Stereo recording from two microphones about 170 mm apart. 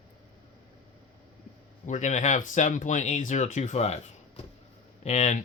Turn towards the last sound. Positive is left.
turn(degrees=40)  # may be behind; listen again after turning